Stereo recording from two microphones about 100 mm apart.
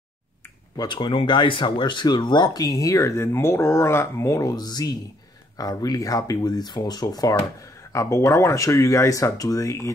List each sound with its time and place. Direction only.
0.7 s speech: 50° left (ahead or behind); by 9.9 s 35° left (ahead or behind)